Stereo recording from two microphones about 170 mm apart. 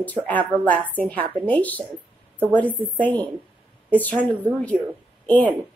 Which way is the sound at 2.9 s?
10° left (ahead or behind).